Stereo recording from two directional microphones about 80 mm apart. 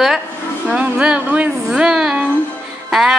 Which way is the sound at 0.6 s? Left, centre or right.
Centre.